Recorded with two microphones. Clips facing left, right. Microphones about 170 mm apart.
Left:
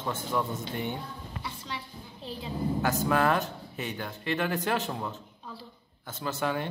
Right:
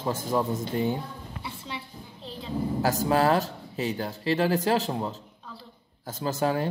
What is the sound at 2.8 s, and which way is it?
Speech, 35° right (ahead or behind).